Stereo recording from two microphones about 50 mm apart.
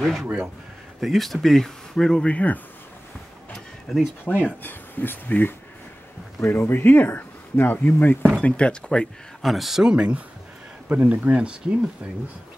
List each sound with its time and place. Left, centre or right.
0.0 s speech: centre
2.2 s speech: left
3.9 s speech: centre
4.3 s speech: left
4.6 s speech: left
6.4 s speech: left
8.4 s speech: left
9.4 s speech: centre
9.8 s speech: right
10.9 s speech: right